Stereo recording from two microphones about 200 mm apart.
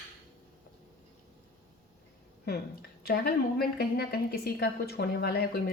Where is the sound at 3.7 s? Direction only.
50° left (ahead or behind).